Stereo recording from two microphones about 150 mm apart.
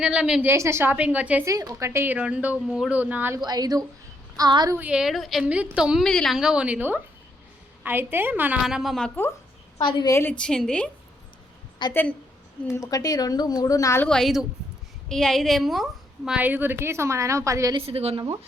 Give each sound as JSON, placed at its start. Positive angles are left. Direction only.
{"t": 0.0, "sound": "a woman's voice", "side_deg": -5}
{"t": 0.5, "sound": "a woman's voice", "side_deg": -15}
{"t": 1.5, "sound": "a woman's voice", "side_deg": -20}
{"t": 3.4, "sound": "speech", "side_deg": -25}
{"t": 4.8, "sound": "a woman's voice", "side_deg": -5}
{"t": 8.6, "sound": "a woman's voice", "side_deg": 0}
{"t": 9.7, "sound": "a woman's voice", "side_deg": 30}
{"t": 10.1, "sound": "a woman's voice", "side_deg": 15}
{"t": 11.8, "sound": "a woman's voice", "side_deg": 30}
{"t": 14.0, "sound": "a woman's voice", "side_deg": 5}
{"t": 17.7, "sound": "a woman's voice", "side_deg": -40}